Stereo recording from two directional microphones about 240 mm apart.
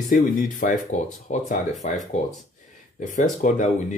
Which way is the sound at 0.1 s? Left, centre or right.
Left.